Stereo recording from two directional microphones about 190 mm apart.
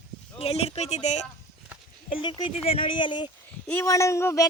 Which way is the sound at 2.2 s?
25° left (ahead or behind).